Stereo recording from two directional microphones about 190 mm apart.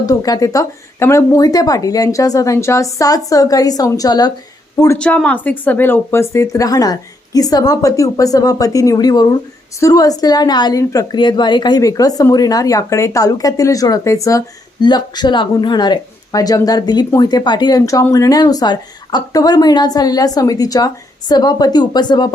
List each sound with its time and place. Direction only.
0.0 s a woman's voice: 20° left (ahead or behind)
4.9 s a woman's voice: 5° left (ahead or behind); by 22.3 s 20° left (ahead or behind)